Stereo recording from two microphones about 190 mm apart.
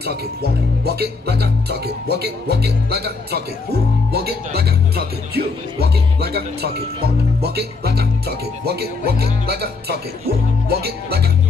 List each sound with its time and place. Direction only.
0.0 s speech: 55° right (ahead or behind)